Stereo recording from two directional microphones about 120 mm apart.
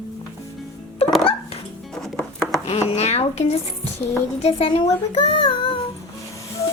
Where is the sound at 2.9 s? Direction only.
60° left (ahead or behind).